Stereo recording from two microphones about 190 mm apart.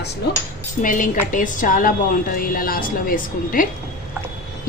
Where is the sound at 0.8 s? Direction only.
45° left (ahead or behind).